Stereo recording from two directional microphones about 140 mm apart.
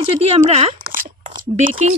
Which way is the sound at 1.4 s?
65° right (ahead or behind).